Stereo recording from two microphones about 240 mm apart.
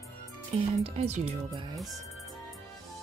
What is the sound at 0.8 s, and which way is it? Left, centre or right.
Speech, right.